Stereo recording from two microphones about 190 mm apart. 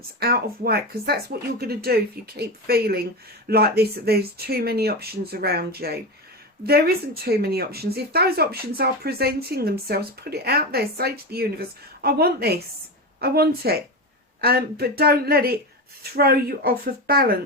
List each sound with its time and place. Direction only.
0.2 s speech: 55° right (ahead or behind)